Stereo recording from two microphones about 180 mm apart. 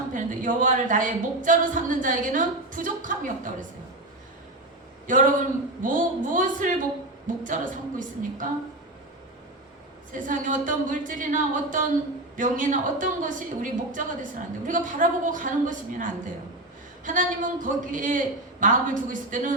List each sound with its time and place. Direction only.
0.1 s a woman's voice: 45° right (ahead or behind)
5.0 s a man's voice: 45° right (ahead or behind)
10.1 s a woman's voice: 45° right (ahead or behind)